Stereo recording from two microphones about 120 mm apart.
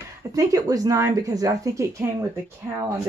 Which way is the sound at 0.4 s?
30° right (ahead or behind).